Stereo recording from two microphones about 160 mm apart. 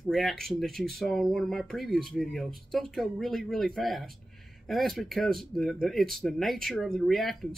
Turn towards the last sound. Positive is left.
turn(degrees=0)  # may be behind; listen again after turning